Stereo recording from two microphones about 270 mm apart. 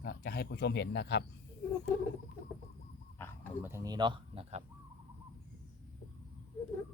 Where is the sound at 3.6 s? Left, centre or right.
Centre.